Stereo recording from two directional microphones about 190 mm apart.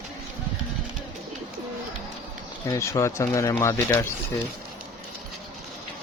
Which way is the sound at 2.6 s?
15° left (ahead or behind).